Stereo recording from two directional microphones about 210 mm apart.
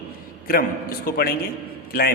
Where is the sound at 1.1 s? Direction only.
45° left (ahead or behind).